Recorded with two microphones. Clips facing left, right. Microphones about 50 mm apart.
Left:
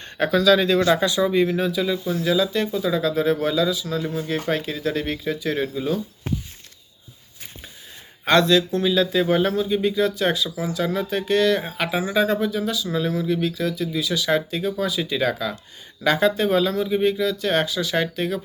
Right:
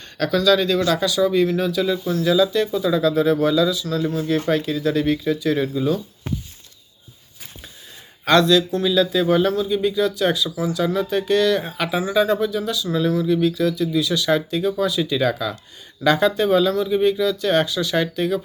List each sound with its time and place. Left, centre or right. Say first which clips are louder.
0.3 s speech: even; centre
8.3 s speech: right 2 dB; left; by 18.3 s centre